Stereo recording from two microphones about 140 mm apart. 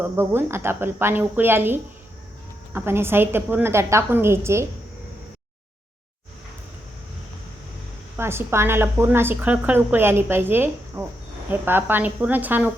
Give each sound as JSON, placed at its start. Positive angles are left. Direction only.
{"t": 0.0, "sound": "a woman's voice", "side_deg": -15}
{"t": 8.1, "sound": "a woman's voice", "side_deg": -15}